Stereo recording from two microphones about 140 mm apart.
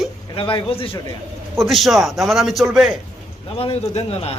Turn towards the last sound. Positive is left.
turn(degrees=45)  # may be behind; listen again after turning